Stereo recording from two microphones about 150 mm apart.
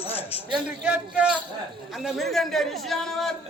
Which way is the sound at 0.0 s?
40° left (ahead or behind).